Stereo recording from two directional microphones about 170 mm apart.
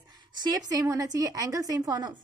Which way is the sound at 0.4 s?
20° right (ahead or behind).